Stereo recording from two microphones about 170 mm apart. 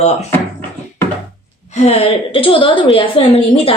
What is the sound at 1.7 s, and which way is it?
Speech, 35° left (ahead or behind).